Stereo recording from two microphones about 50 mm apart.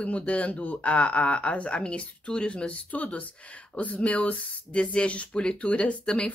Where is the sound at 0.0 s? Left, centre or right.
Left.